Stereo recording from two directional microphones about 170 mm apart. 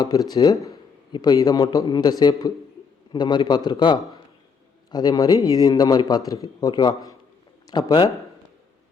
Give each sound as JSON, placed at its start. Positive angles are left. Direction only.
{"t": 0.0, "sound": "speech", "side_deg": 20}